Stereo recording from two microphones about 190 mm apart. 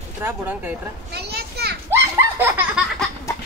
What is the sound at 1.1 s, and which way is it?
Children playing, 60° right (ahead or behind).